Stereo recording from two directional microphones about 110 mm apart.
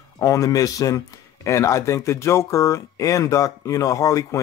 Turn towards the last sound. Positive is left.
turn(degrees=30)  # may be behind; listen again after turning